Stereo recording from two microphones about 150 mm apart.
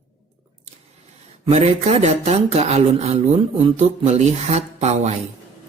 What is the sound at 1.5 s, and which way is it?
Speech, 45° right (ahead or behind).